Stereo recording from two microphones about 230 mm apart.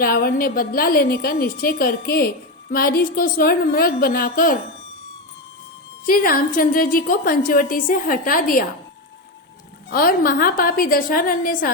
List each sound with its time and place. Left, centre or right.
0.0 s a woman's voice: left
6.1 s a woman's voice: left
9.9 s a woman's voice: left